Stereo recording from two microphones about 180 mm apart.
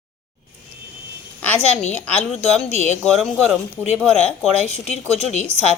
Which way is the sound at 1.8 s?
35° left (ahead or behind).